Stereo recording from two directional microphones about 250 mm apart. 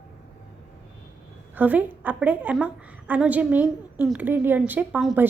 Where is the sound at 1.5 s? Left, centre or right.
Centre.